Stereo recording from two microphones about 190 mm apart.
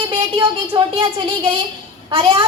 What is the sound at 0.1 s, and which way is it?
A woman's voice, 25° right (ahead or behind).